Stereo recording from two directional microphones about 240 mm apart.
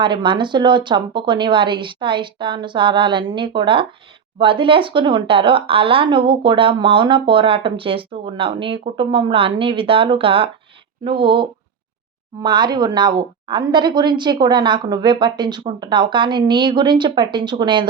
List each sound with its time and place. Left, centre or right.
0.0 s speech: centre